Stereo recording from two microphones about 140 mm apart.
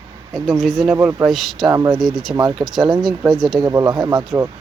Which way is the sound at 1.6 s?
25° right (ahead or behind).